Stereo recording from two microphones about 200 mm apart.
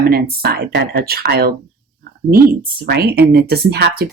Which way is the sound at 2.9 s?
50° right (ahead or behind).